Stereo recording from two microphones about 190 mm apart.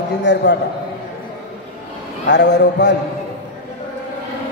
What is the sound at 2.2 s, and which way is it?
Speech, 65° left (ahead or behind).